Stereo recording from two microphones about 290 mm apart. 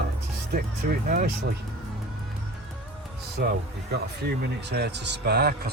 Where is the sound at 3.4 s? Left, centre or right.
Right.